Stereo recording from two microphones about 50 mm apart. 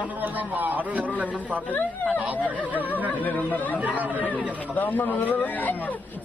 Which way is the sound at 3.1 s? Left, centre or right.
Left.